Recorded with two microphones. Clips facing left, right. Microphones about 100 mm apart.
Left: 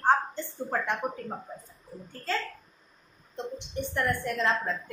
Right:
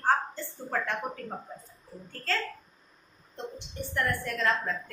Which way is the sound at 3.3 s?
20° left (ahead or behind).